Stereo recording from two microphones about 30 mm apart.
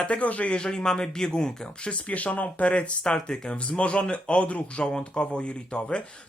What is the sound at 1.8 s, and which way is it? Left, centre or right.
Speech, left.